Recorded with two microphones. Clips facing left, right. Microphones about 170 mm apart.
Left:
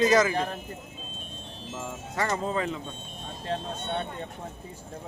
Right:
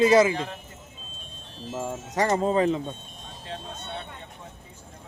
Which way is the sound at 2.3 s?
30° right (ahead or behind).